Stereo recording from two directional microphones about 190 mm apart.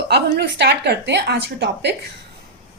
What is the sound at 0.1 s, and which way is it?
A woman's voice, 60° right (ahead or behind).